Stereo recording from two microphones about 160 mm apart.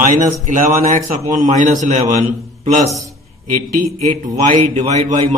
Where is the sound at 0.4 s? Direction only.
50° right (ahead or behind).